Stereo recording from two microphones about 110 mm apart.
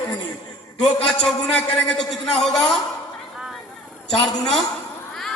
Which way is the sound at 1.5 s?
5° left (ahead or behind).